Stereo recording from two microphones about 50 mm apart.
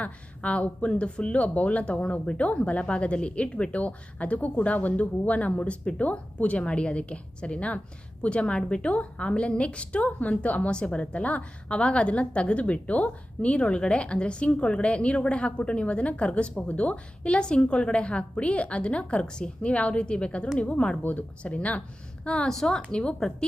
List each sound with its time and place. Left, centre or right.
0.0 s a woman's voice: left
21.0 s a woman's voice: left
22.4 s a woman's voice: centre